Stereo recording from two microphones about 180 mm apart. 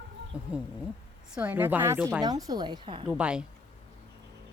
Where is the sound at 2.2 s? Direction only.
20° right (ahead or behind).